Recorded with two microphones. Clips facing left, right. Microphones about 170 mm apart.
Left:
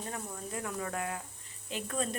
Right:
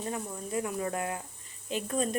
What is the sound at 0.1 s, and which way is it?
Speech, 15° right (ahead or behind).